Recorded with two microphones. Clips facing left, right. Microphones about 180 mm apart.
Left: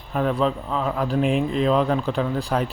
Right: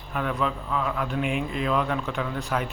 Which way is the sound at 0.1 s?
35° left (ahead or behind).